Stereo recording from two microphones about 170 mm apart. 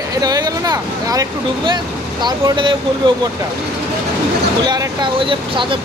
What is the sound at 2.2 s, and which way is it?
Speech, 25° right (ahead or behind).